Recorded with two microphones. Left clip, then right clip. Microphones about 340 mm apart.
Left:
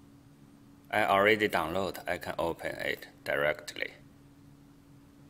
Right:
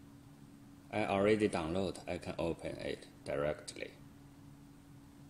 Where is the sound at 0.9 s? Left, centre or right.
Left.